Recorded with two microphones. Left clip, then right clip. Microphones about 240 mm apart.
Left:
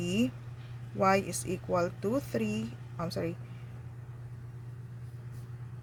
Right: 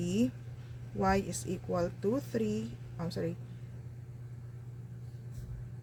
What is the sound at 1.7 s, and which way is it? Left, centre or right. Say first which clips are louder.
Speech: left 2 dB; left.